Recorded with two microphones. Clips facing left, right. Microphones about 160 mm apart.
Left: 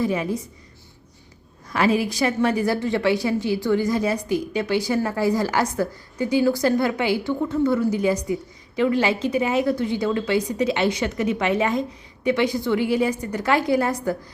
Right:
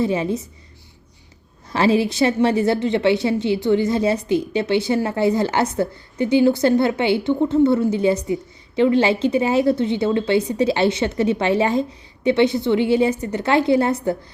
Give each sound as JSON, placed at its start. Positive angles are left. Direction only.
{"t": 0.0, "sound": "a woman's voice", "side_deg": -25}
{"t": 1.7, "sound": "a woman's voice", "side_deg": -30}